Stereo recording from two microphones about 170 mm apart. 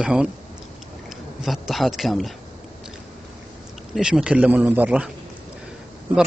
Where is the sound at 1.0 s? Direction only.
Centre (ahead or behind).